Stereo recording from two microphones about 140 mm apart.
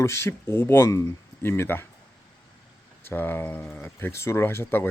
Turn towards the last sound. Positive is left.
turn(degrees=15)  # may be behind; listen again after turning